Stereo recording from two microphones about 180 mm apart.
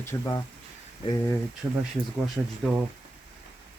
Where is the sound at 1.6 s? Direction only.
10° right (ahead or behind).